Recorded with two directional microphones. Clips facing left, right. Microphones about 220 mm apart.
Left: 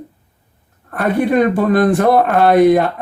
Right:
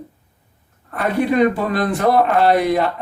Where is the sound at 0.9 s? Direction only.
50° left (ahead or behind).